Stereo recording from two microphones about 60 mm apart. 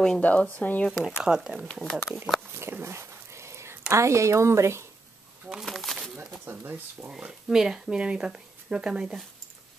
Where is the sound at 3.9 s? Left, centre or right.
Right.